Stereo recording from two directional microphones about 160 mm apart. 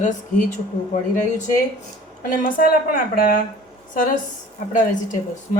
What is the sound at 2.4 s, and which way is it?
A woman's voice, 55° left (ahead or behind).